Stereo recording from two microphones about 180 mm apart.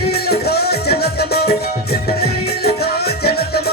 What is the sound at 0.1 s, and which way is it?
Music, 60° left (ahead or behind).